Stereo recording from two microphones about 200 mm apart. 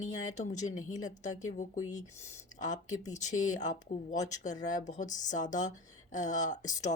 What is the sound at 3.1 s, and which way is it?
Speech, 35° left (ahead or behind).